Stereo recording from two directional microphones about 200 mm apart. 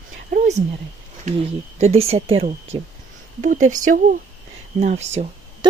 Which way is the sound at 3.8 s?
45° right (ahead or behind).